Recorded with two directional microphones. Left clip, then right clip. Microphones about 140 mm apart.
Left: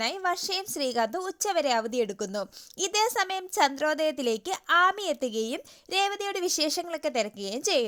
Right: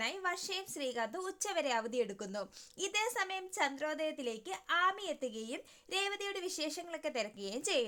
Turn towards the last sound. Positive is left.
turn(degrees=35)  # may be behind; listen again after turning